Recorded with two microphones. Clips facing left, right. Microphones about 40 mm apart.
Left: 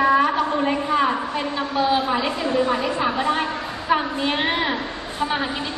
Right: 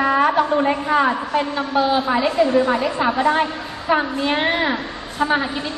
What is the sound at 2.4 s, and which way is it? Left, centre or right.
A man's voice, right.